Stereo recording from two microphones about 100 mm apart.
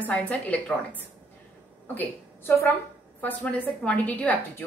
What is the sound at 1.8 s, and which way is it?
Speech, 20° left (ahead or behind).